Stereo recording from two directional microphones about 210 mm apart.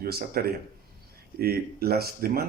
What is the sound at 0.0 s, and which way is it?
Speech, 45° right (ahead or behind).